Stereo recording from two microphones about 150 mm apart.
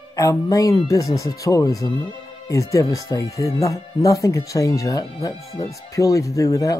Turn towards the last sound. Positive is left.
turn(degrees=20)  # may be behind; listen again after turning